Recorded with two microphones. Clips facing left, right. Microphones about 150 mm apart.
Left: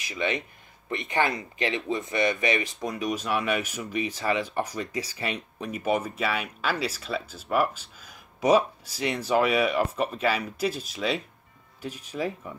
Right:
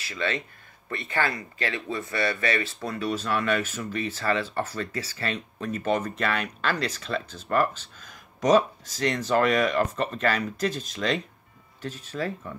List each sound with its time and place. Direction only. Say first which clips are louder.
0.0 s speech: left 1 dB; 15° left (ahead or behind)